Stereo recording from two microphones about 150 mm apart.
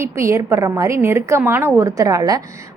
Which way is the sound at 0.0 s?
20° right (ahead or behind).